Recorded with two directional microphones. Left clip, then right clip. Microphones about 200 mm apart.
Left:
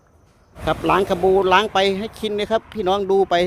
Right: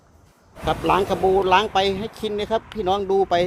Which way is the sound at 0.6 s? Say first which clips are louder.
Left 2 dB; 30° left (ahead or behind).